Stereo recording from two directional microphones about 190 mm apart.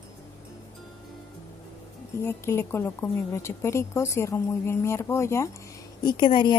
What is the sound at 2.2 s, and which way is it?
A woman's voice, 10° left (ahead or behind).